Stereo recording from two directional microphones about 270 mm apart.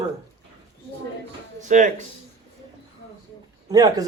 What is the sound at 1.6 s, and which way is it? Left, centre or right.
Speech, right.